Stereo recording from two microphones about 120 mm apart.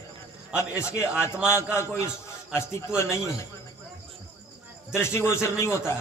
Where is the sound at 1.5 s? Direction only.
20° left (ahead or behind).